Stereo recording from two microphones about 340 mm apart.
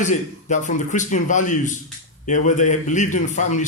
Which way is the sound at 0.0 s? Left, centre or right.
Left.